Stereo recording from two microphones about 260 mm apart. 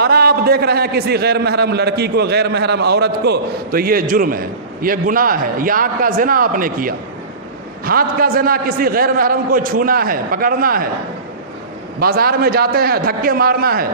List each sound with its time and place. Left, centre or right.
0.0 s a man's voice: right
11.9 s a man's voice: right